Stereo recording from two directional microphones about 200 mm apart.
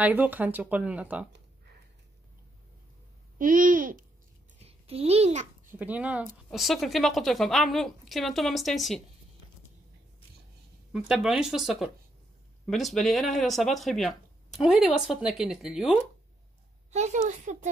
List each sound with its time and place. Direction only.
0.0 s speech: 10° right (ahead or behind)
3.3 s a child's voice: 45° right (ahead or behind)
4.6 s a child's voice: 30° right (ahead or behind)
5.7 s a woman's voice: 10° right (ahead or behind)
10.9 s a woman's voice: centre (ahead or behind)
16.9 s a woman's voice: 35° right (ahead or behind)